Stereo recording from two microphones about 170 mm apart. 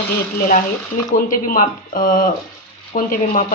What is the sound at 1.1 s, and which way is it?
A woman's voice, 55° left (ahead or behind).